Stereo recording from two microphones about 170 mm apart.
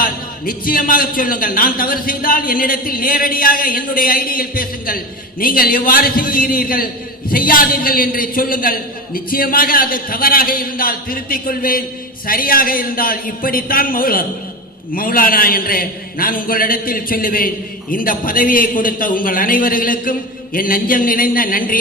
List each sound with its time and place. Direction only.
0.0 s a man's voice: 55° left (ahead or behind)